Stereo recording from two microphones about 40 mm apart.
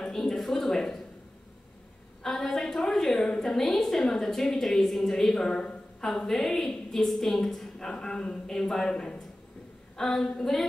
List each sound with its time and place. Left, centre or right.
0.0 s speech: centre
2.2 s a woman's voice: centre; by 9.2 s left
9.9 s a woman's voice: centre